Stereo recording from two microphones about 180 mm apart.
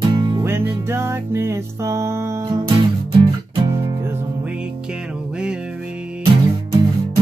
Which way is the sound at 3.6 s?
15° right (ahead or behind).